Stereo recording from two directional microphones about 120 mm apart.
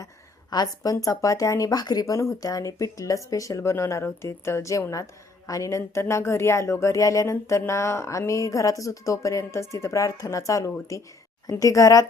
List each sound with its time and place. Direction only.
0.5 s speech: 30° left (ahead or behind)